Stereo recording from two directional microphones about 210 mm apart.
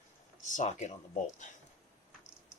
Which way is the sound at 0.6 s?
35° left (ahead or behind).